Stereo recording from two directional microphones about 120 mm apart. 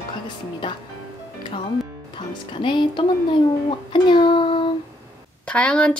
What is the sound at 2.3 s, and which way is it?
Speech, 40° left (ahead or behind).